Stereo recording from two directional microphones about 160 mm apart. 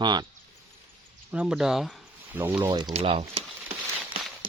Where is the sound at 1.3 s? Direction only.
5° right (ahead or behind).